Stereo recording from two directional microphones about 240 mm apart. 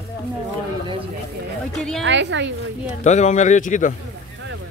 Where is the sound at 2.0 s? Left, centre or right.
Right.